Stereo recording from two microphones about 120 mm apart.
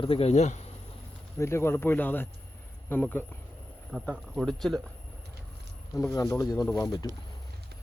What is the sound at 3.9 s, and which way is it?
A man's voice, 5° right (ahead or behind).